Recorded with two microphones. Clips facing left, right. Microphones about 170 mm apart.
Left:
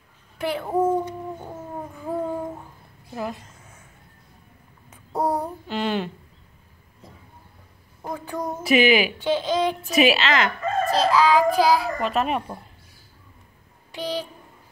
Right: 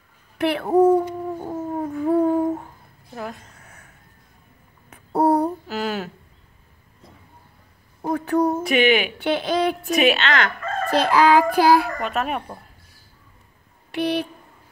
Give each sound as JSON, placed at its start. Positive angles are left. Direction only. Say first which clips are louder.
{"t": 0.4, "sound": "a woman's voice", "louder": "right 6 dB", "side_deg": -65}
{"t": 2.0, "sound": "humming", "louder": "right 9 dB", "side_deg": -65}
{"t": 3.2, "sound": "a sound", "louder": "left 2 dB", "side_deg": 0}
{"t": 3.5, "sound": "a sound", "louder": "right 1 dB", "side_deg": -65}
{"t": 4.8, "sound": "babbling", "louder": "right 6 dB", "side_deg": -65}
{"t": 5.7, "sound": "a sound", "louder": "left 1 dB", "side_deg": -5}
{"t": 8.1, "sound": "a sound", "louder": "right 9 dB", "side_deg": -65}
{"t": 8.6, "sound": "a woman's voice", "louder": "even", "side_deg": 0}
{"t": 9.2, "sound": "speech", "louder": "right 1 dB", "side_deg": -65}
{"t": 9.9, "sound": "a woman's voice", "louder": "left 1 dB", "side_deg": 0}
{"t": 10.9, "sound": "a child's voice", "louder": "right 3 dB", "side_deg": -60}
{"t": 12.0, "sound": "a woman's voice", "louder": "left 2 dB", "side_deg": 0}
{"t": 13.9, "sound": "a child's voice", "louder": "right 6 dB", "side_deg": -65}